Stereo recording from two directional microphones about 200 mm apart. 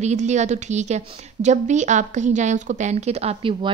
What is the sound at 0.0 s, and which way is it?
A woman's voice, 35° right (ahead or behind).